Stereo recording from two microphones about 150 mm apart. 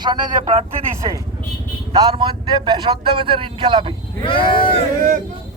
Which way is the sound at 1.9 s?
30° right (ahead or behind).